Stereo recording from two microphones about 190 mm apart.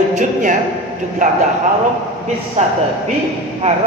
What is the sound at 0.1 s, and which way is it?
A man's voice, 40° right (ahead or behind).